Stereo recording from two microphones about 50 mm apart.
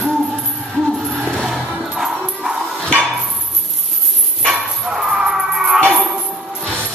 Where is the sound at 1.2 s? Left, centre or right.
Centre.